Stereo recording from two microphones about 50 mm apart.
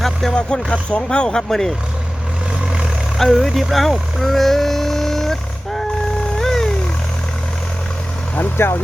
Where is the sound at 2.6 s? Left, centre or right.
Centre.